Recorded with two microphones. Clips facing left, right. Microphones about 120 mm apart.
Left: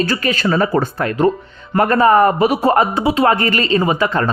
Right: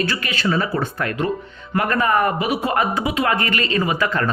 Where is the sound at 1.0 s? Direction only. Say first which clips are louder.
Left 7 dB; 30° left (ahead or behind).